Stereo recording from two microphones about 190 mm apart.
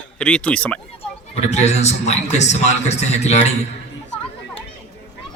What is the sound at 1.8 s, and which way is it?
A man's voice, 35° left (ahead or behind).